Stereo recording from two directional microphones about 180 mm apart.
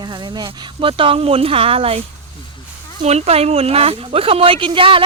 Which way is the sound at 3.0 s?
35° right (ahead or behind).